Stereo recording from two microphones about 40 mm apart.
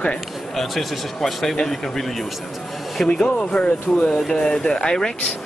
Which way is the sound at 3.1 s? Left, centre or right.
Left.